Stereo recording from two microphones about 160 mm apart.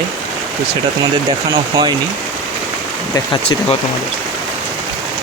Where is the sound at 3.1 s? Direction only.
30° left (ahead or behind).